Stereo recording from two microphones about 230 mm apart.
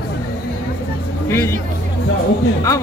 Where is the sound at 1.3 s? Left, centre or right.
Centre.